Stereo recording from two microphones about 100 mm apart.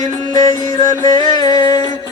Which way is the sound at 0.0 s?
50° right (ahead or behind).